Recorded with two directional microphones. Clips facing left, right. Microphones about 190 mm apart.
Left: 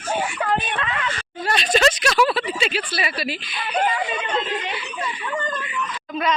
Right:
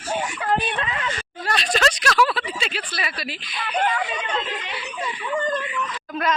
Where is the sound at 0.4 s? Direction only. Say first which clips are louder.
Even; 40° right (ahead or behind).